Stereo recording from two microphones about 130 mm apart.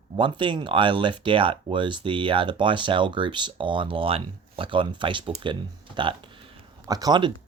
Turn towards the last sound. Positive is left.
turn(degrees=-30)  # may be behind; listen again after turning